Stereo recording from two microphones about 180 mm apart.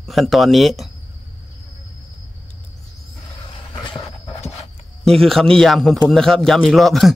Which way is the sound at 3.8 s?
25° left (ahead or behind).